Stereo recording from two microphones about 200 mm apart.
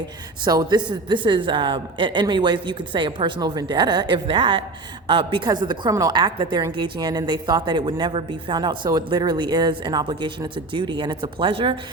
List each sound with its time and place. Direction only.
0.4 s a woman's voice: 20° right (ahead or behind)